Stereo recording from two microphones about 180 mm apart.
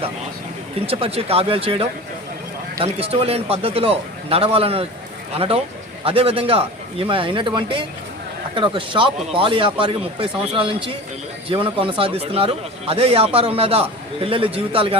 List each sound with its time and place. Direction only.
0.9 s a man's voice: 30° right (ahead or behind)